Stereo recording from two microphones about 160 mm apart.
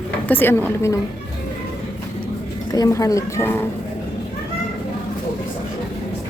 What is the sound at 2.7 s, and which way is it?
Speech, 20° left (ahead or behind).